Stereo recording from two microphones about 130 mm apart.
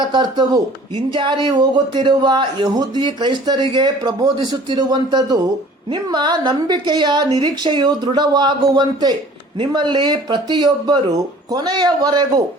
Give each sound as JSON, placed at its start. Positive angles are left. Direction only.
{"t": 0.1, "sound": "speech", "side_deg": -35}